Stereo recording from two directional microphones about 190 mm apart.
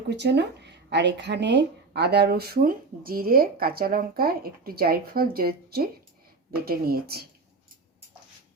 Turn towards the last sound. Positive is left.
turn(degrees=-55)  # may be behind; listen again after turning